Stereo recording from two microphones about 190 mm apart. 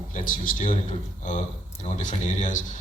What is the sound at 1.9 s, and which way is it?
Speech, 40° left (ahead or behind).